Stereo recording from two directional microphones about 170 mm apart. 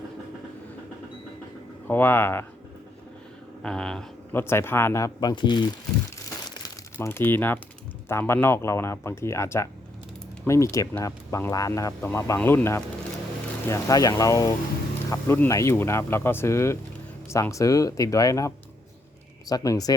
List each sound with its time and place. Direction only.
1.9 s speech: 15° left (ahead or behind)
3.6 s speech: 5° left (ahead or behind); by 5.6 s 25° left (ahead or behind)
6.9 s speech: 15° left (ahead or behind)